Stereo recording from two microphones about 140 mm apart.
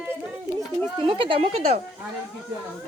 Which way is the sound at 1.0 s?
40° right (ahead or behind).